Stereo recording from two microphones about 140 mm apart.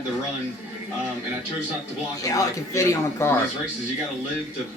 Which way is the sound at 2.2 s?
25° left (ahead or behind).